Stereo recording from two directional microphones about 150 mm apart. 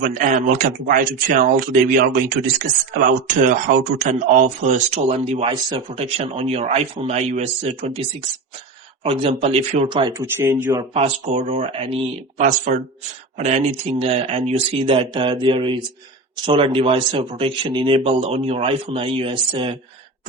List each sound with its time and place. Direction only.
0.0 s speech: 60° right (ahead or behind); by 6.0 s 30° right (ahead or behind)
6.0 s speech: 45° right (ahead or behind)
9.0 s speech: 40° right (ahead or behind)
10.2 s speech: 15° right (ahead or behind)
10.9 s speech: 45° right (ahead or behind)
12.4 s speech: 55° right (ahead or behind)
13.8 s speech: 40° right (ahead or behind)